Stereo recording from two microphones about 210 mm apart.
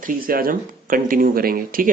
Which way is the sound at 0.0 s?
40° right (ahead or behind).